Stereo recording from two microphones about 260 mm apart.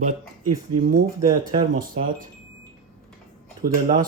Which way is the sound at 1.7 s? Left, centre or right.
Right.